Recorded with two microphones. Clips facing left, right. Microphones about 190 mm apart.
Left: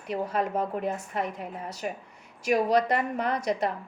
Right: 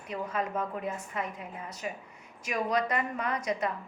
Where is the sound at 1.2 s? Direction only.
70° left (ahead or behind).